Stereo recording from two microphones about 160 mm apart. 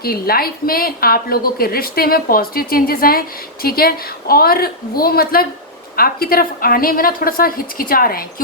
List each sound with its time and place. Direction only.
0.0 s a woman's voice: 70° left (ahead or behind)